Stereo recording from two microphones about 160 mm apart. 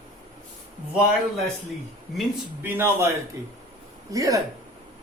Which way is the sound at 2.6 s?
15° right (ahead or behind).